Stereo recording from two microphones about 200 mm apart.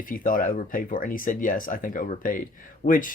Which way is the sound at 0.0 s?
45° left (ahead or behind).